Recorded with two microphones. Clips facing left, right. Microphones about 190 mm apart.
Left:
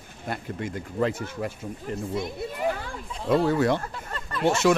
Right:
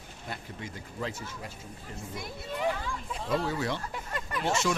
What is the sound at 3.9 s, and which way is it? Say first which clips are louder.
Speech: left 1 dB; 15° right (ahead or behind).